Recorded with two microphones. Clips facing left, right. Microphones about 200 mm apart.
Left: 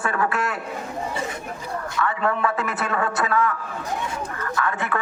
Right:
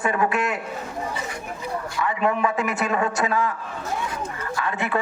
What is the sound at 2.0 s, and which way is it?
A man's voice, 15° right (ahead or behind).